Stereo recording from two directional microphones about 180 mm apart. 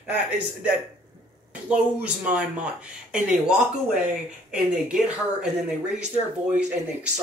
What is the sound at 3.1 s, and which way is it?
Speech, 5° right (ahead or behind).